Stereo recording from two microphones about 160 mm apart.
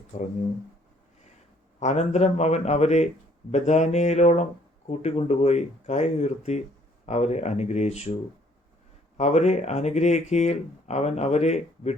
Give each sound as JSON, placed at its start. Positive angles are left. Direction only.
{"t": 0.1, "sound": "speech", "side_deg": 45}
{"t": 1.8, "sound": "speech", "side_deg": 45}
{"t": 9.1, "sound": "speech", "side_deg": 45}